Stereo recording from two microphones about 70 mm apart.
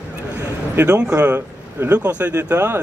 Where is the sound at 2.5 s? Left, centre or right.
Right.